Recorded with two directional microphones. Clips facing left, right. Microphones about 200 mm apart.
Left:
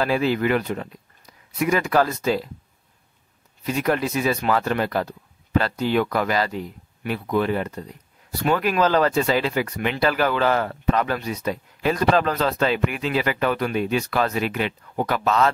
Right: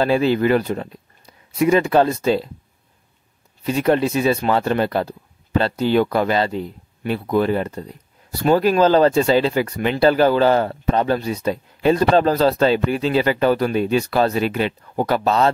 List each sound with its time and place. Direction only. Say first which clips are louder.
0.0 s speech: right 4 dB; 30° right (ahead or behind)
3.6 s speech: right 5 dB; 30° right (ahead or behind)